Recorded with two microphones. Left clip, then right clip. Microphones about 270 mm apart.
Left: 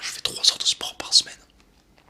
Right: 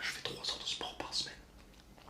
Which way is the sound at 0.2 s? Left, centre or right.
Left.